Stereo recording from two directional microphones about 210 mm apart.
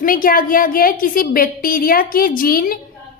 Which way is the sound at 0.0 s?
40° left (ahead or behind).